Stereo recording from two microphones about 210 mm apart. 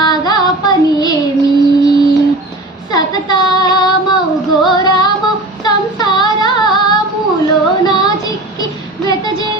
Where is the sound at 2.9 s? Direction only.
20° left (ahead or behind).